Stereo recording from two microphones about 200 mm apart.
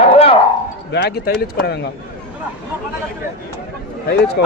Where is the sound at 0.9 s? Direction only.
55° left (ahead or behind).